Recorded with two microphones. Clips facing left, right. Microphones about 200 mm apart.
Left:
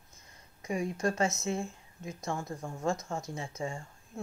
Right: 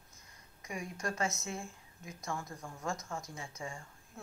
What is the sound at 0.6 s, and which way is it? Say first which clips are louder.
Speech: left 8 dB; 30° left (ahead or behind).